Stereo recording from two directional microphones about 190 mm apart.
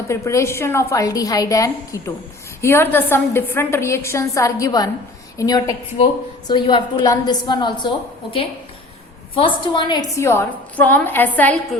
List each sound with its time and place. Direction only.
0.1 s a woman's voice: 15° left (ahead or behind)